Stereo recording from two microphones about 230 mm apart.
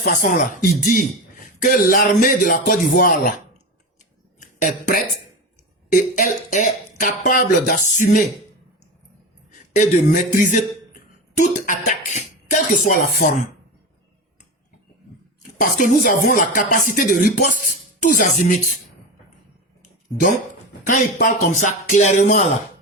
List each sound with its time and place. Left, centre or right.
0.0 s speech: left
4.4 s speech: left
9.7 s speech: left
15.8 s speech: left
20.8 s speech: left